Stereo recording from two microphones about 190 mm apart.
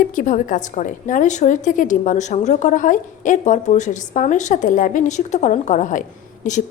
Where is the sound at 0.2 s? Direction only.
45° left (ahead or behind).